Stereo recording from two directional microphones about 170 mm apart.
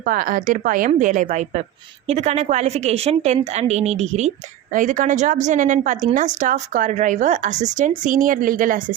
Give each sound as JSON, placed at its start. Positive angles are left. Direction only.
{"t": 0.0, "sound": "a woman's voice", "side_deg": -55}